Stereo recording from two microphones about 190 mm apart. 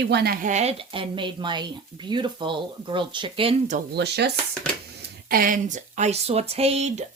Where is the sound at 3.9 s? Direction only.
60° right (ahead or behind).